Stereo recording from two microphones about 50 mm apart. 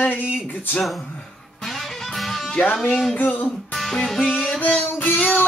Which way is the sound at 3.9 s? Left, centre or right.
Centre.